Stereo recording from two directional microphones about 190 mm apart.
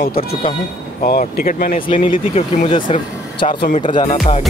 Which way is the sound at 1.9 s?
30° left (ahead or behind).